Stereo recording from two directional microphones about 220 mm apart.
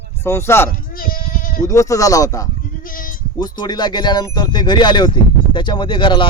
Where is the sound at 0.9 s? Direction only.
40° left (ahead or behind).